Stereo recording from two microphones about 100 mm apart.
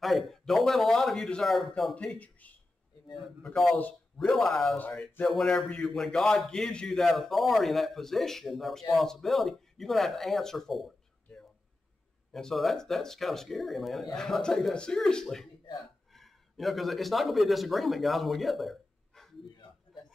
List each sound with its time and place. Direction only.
0.0 s a man's voice: centre (ahead or behind)
2.0 s speech: 10° left (ahead or behind)
3.4 s a man's voice: 5° left (ahead or behind)
3.7 s a man's voice: 15° left (ahead or behind)
4.3 s a man's voice: centre (ahead or behind)
12.3 s a man's voice: 5° left (ahead or behind)
19.5 s a sound: 50° left (ahead or behind)